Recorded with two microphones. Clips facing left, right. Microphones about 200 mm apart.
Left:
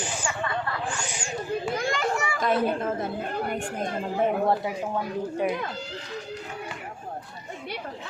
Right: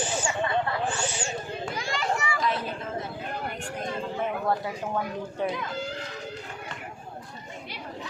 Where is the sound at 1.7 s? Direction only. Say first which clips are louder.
Even; 50° left (ahead or behind).